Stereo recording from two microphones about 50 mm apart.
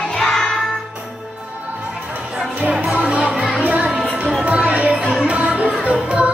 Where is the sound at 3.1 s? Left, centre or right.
Right.